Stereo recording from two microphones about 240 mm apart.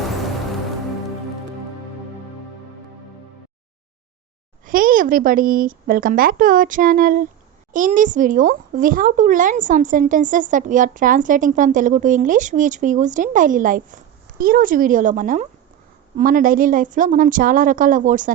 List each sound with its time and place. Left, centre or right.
4.6 s speech: right